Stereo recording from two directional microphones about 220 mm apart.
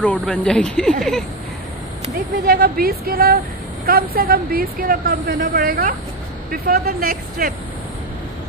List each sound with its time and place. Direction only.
0.0 s speech: 5° left (ahead or behind)
2.4 s speech: 45° right (ahead or behind)